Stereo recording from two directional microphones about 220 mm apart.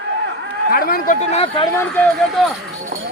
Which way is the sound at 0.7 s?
40° left (ahead or behind).